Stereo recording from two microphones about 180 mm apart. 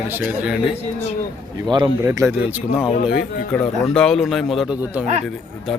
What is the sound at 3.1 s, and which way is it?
Speech, 60° left (ahead or behind).